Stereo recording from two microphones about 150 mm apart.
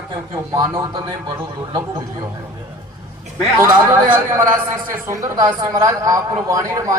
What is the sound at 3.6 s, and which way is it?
A man's voice, 20° right (ahead or behind).